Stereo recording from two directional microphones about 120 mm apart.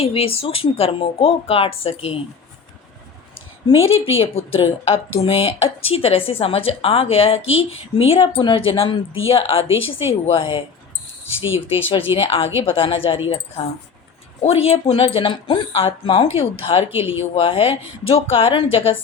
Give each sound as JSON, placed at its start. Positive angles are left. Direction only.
{"t": 0.0, "sound": "a woman's voice", "side_deg": 50}
{"t": 3.7, "sound": "a woman's voice", "side_deg": 50}
{"t": 11.9, "sound": "a woman's voice", "side_deg": 50}
{"t": 14.4, "sound": "a woman's voice", "side_deg": 55}